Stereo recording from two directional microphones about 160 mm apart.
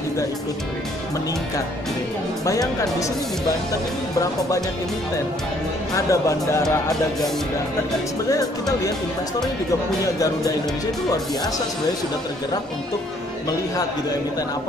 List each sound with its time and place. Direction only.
2.4 s speech: 20° left (ahead or behind)
4.2 s speech: 20° left (ahead or behind)
5.9 s speech: 20° left (ahead or behind)
8.3 s speech: 20° left (ahead or behind)